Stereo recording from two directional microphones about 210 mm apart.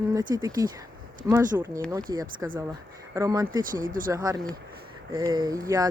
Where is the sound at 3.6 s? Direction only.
40° right (ahead or behind).